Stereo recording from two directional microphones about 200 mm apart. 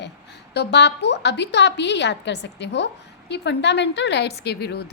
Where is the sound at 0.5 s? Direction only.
60° left (ahead or behind).